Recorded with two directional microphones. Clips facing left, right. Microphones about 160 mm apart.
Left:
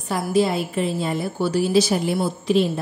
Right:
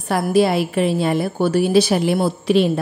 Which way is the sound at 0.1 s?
65° right (ahead or behind).